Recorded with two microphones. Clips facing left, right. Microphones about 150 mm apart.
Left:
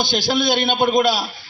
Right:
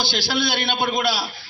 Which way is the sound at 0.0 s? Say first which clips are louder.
Left 4 dB; 15° left (ahead or behind).